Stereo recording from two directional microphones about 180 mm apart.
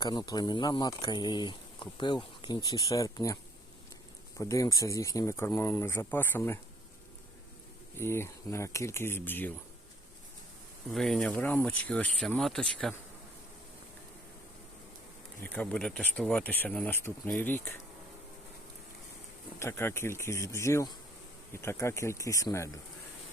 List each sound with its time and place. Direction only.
0.0 s speech: 20° left (ahead or behind)
4.4 s speech: 20° left (ahead or behind)
7.9 s speech: 15° left (ahead or behind)
10.9 s speech: centre (ahead or behind)
15.5 s speech: 5° left (ahead or behind)
19.5 s speech: 15° left (ahead or behind)